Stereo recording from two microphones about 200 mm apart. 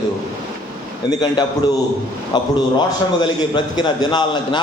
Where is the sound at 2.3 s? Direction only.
20° left (ahead or behind).